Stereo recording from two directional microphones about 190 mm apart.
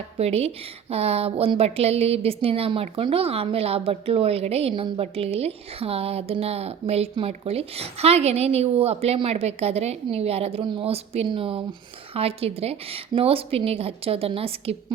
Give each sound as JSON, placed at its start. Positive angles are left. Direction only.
{"t": 0.2, "sound": "a woman's voice", "side_deg": -35}